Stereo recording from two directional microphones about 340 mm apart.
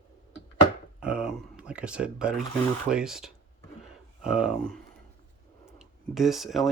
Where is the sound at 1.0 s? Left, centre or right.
Centre.